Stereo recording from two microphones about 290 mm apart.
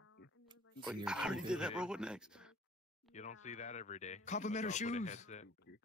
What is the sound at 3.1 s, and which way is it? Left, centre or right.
A man's voice, left.